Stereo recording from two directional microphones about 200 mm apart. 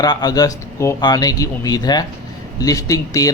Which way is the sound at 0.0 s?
20° left (ahead or behind).